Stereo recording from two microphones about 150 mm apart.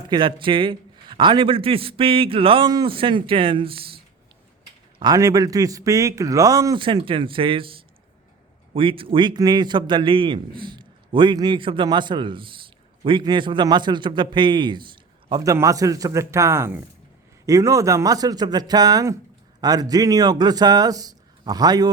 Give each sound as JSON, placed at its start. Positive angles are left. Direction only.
{"t": 0.1, "sound": "a man's voice", "side_deg": -35}
{"t": 4.9, "sound": "speech", "side_deg": -25}
{"t": 6.8, "sound": "a man's voice", "side_deg": -35}
{"t": 15.5, "sound": "speech", "side_deg": -20}